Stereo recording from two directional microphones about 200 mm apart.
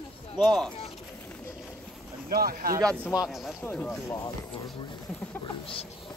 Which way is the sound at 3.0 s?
15° left (ahead or behind).